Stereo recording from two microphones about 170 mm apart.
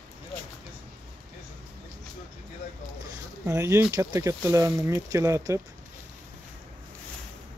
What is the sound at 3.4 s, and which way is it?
Speech, 15° right (ahead or behind).